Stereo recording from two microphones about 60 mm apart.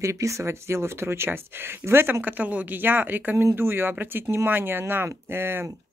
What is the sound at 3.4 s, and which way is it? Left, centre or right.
Speech, right.